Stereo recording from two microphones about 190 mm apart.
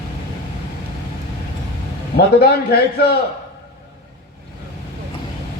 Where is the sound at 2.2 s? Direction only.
55° left (ahead or behind).